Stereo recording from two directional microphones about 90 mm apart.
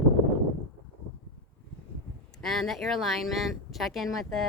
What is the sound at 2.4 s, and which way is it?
Speech, 5° left (ahead or behind).